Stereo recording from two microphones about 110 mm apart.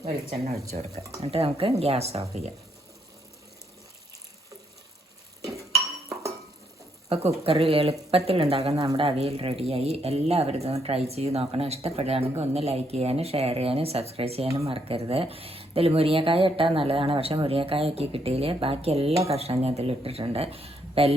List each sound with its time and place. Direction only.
0.7 s speech: 75° right (ahead or behind)
7.1 s speech: 70° right (ahead or behind)